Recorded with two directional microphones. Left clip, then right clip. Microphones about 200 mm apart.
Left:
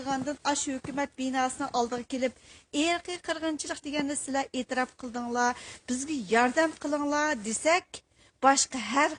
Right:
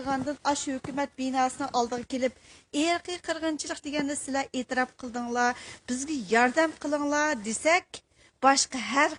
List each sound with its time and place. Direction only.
0.0 s a woman's voice: 30° right (ahead or behind)